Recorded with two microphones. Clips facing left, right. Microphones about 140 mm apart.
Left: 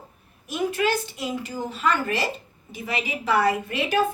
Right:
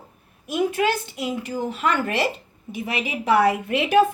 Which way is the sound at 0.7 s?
55° right (ahead or behind).